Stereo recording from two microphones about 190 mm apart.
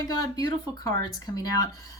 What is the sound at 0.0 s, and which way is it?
Speech, 20° left (ahead or behind).